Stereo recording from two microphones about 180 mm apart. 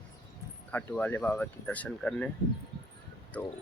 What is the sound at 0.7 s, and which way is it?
Speech, 10° left (ahead or behind).